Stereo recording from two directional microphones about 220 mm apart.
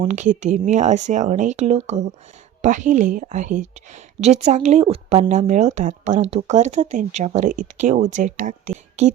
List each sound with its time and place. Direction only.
0.0 s a woman's voice: 35° right (ahead or behind)